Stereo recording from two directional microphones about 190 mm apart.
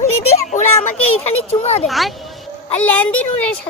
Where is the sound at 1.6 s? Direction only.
35° left (ahead or behind).